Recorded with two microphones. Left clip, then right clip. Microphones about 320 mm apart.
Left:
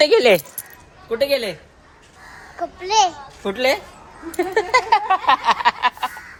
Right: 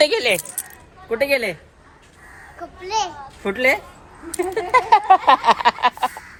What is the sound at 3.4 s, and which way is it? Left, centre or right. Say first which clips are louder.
A woman's voice: right 1 dB; centre.